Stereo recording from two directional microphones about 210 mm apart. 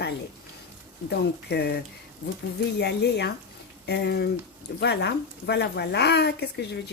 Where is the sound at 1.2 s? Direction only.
50° left (ahead or behind).